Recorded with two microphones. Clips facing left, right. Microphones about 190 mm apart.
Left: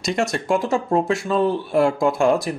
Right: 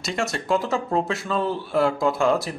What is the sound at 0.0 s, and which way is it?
Speech, 15° left (ahead or behind).